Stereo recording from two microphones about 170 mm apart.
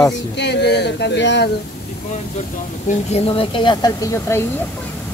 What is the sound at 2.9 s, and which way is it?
Speech, 35° left (ahead or behind).